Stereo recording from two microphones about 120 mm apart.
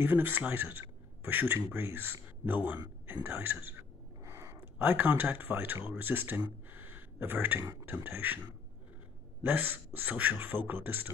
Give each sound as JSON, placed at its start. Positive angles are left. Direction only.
{"t": 0.0, "sound": "a man's voice", "side_deg": -15}
{"t": 4.2, "sound": "a sound", "side_deg": -25}
{"t": 5.9, "sound": "speech", "side_deg": -15}
{"t": 9.4, "sound": "a man's voice", "side_deg": -15}